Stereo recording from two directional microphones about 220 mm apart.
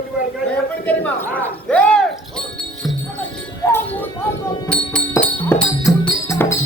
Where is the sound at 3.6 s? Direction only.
10° left (ahead or behind).